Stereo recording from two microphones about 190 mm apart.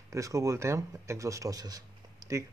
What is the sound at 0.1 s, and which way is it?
Speech, 15° right (ahead or behind).